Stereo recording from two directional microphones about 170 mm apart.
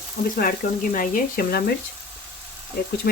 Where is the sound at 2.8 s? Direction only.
65° left (ahead or behind).